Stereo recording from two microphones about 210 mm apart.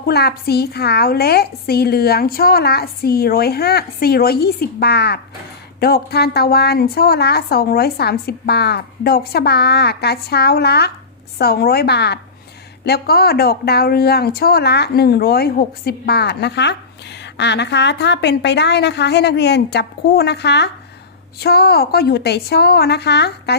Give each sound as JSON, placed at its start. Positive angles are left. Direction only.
{"t": 0.1, "sound": "speech", "side_deg": 50}